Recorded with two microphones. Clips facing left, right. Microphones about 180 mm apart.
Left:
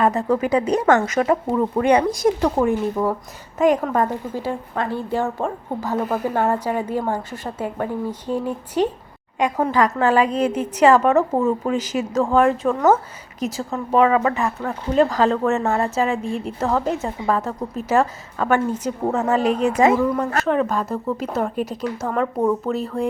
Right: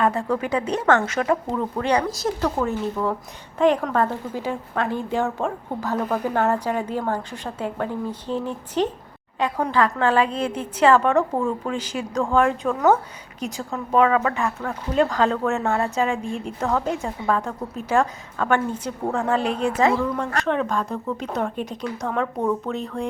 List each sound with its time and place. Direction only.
0.3 s a woman's voice: 10° left (ahead or behind)
1.8 s a woman's voice: 20° left (ahead or behind)
19.4 s a woman's voice: 40° left (ahead or behind)
19.8 s a woman's voice: 15° left (ahead or behind)